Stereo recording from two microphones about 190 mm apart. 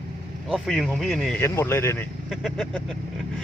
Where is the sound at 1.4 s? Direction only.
15° left (ahead or behind).